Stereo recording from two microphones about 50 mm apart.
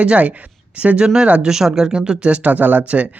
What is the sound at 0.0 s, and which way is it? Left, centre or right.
Speech, right.